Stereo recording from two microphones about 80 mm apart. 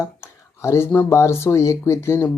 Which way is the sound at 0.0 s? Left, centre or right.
Left.